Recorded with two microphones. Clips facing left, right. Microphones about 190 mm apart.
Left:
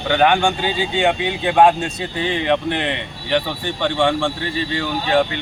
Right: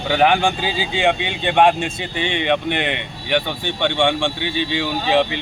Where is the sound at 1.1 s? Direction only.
85° right.